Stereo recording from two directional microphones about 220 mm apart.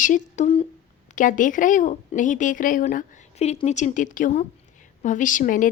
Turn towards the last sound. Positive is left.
turn(degrees=35)  # may be behind; listen again after turning